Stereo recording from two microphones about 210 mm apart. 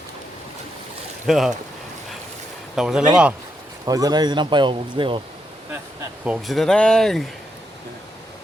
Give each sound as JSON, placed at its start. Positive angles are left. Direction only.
{"t": 1.3, "sound": "speech", "side_deg": 0}
{"t": 2.7, "sound": "speech", "side_deg": 0}
{"t": 3.8, "sound": "speech", "side_deg": -20}
{"t": 6.2, "sound": "speech", "side_deg": 0}